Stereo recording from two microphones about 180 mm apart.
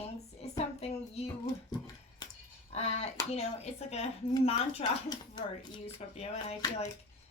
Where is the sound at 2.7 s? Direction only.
35° left (ahead or behind).